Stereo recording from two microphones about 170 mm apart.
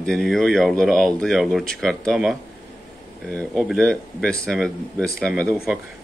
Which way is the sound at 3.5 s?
Centre (ahead or behind).